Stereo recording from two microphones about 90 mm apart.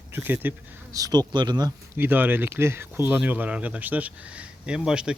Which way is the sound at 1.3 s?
55° right (ahead or behind).